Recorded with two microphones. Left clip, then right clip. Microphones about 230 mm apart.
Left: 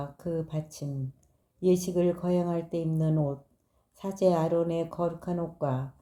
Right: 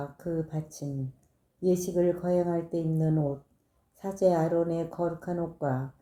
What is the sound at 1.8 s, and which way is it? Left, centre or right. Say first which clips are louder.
Speech: right 1 dB; left.